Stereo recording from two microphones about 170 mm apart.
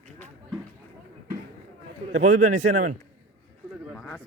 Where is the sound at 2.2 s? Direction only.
45° right (ahead or behind).